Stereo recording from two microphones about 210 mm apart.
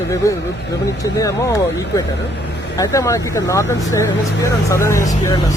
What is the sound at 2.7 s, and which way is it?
Speech, 15° left (ahead or behind).